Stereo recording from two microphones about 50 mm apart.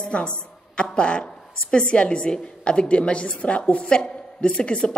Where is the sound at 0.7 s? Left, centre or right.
Left.